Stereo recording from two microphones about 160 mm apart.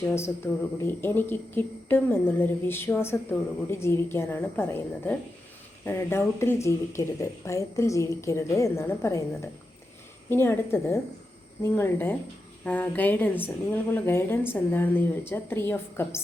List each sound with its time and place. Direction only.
0.0 s speech: 15° left (ahead or behind)